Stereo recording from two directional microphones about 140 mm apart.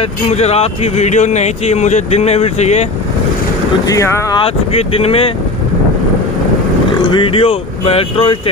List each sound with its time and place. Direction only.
0.3 s speech: 50° left (ahead or behind)
3.8 s speech: 20° left (ahead or behind)
4.4 s speech: 45° left (ahead or behind)
7.0 s speech: 35° left (ahead or behind)